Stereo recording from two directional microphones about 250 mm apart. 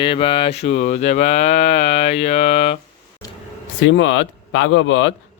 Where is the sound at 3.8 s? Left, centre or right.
Left.